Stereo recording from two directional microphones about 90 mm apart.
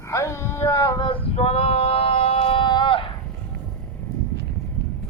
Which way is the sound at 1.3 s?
90° left.